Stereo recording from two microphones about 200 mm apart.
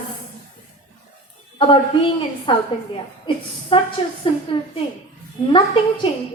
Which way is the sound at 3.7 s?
25° left (ahead or behind).